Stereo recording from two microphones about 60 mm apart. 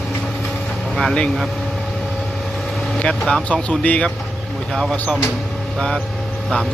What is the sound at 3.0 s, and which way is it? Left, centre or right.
Speech, centre.